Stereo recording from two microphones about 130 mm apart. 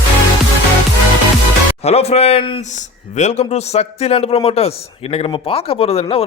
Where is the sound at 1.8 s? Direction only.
50° left (ahead or behind).